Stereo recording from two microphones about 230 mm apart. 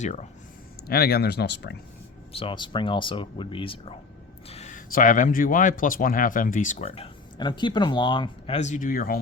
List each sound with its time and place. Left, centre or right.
0.0 s speech: left
0.9 s speech: left
2.3 s speech: left